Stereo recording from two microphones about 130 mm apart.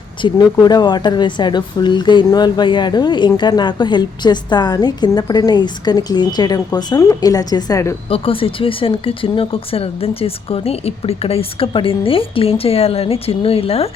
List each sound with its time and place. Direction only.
0.2 s speech: 35° left (ahead or behind)
8.1 s speech: 45° left (ahead or behind)